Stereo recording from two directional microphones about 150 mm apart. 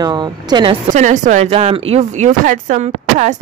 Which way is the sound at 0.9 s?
55° right (ahead or behind).